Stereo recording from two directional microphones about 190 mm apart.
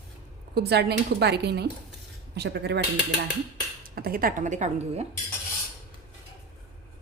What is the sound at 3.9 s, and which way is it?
A woman's voice, 50° right (ahead or behind).